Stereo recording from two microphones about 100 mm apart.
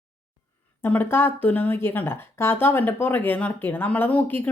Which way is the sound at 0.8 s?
20° left (ahead or behind).